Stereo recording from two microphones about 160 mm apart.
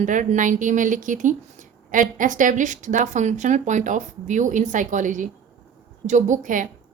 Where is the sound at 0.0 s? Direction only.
50° right (ahead or behind).